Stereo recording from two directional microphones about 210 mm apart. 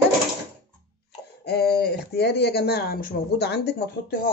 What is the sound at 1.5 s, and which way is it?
Speech, 50° left (ahead or behind).